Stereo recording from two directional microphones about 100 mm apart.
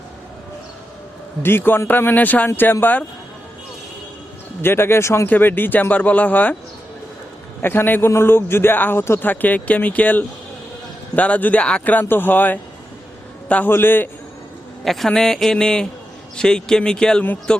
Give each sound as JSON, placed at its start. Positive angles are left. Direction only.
{"t": 1.4, "sound": "a man's voice", "side_deg": 20}
{"t": 4.6, "sound": "a man's voice", "side_deg": 25}
{"t": 7.6, "sound": "a man's voice", "side_deg": 20}
{"t": 14.8, "sound": "a man's voice", "side_deg": 0}